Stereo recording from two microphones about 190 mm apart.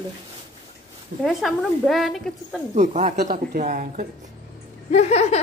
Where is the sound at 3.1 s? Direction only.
50° right (ahead or behind).